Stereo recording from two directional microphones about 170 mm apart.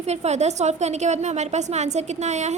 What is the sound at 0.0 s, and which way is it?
A woman's voice, 40° right (ahead or behind).